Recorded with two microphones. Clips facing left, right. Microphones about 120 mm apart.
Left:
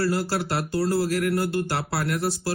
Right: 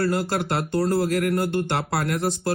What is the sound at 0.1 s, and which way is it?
Speech, 25° right (ahead or behind).